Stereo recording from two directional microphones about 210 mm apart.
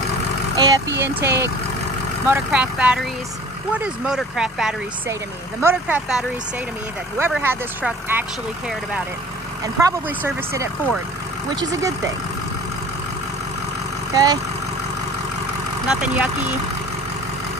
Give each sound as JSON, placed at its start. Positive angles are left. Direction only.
{"t": 0.6, "sound": "speech", "side_deg": -15}
{"t": 14.1, "sound": "speech", "side_deg": -20}
{"t": 15.9, "sound": "speech", "side_deg": -5}